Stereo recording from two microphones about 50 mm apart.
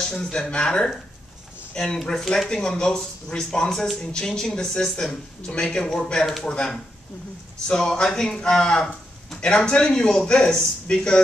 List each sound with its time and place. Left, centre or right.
0.0 s speech: centre